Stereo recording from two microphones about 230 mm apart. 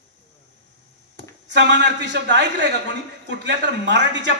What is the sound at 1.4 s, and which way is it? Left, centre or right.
A man's voice, right.